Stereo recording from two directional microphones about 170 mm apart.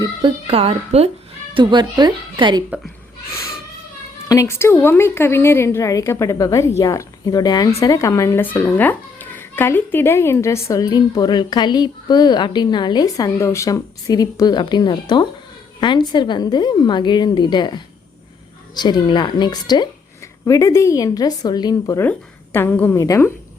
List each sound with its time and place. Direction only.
0.0 s a woman's voice: 30° right (ahead or behind)
1.5 s speech: 25° right (ahead or behind)
2.6 s speech: 5° right (ahead or behind)
4.3 s a woman's voice: 15° left (ahead or behind)